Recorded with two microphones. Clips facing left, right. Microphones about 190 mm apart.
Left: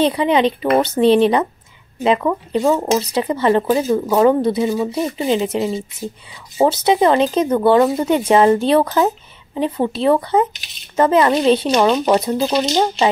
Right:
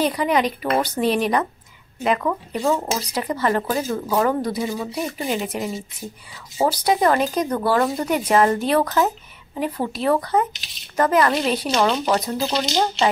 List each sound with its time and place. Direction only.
0.0 s speech: 25° left (ahead or behind)